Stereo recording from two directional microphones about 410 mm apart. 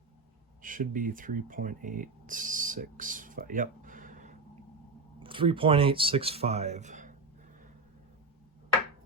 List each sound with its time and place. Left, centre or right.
0.6 s speech: centre